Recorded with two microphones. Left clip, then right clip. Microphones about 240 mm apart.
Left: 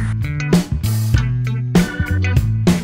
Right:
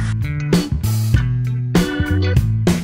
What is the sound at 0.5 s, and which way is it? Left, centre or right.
Music, centre.